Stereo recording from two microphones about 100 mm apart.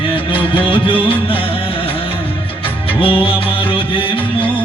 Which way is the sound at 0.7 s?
60° left (ahead or behind).